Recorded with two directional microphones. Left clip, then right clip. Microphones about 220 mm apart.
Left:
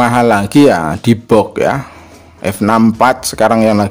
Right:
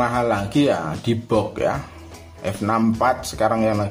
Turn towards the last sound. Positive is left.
turn(degrees=45)  # may be behind; listen again after turning